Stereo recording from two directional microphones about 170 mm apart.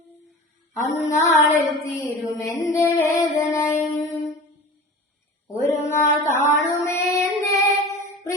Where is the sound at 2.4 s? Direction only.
20° left (ahead or behind).